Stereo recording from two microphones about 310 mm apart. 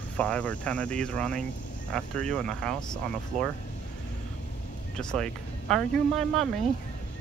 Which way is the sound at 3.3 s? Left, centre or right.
Right.